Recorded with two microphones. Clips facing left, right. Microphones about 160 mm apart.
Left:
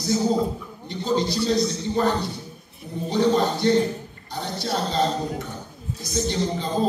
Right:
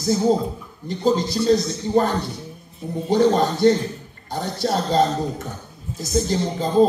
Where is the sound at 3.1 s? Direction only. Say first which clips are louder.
Right 3 dB; 45° right (ahead or behind).